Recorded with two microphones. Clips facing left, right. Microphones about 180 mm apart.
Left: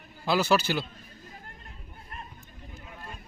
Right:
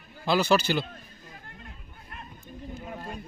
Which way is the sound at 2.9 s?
45° right (ahead or behind).